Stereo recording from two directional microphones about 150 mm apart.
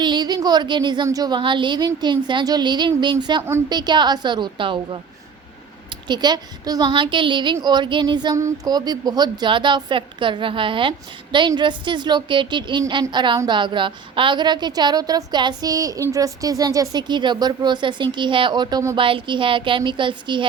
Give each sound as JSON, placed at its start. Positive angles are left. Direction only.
{"t": 0.0, "sound": "a woman's voice", "side_deg": -30}
{"t": 18.9, "sound": "a woman's voice", "side_deg": -35}